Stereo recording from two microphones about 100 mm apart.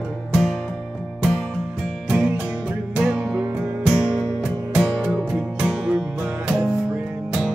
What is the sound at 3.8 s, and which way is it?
Music, 5° left (ahead or behind).